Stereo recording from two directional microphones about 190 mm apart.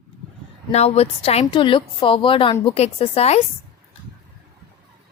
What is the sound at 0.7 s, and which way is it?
A woman's voice, 35° left (ahead or behind).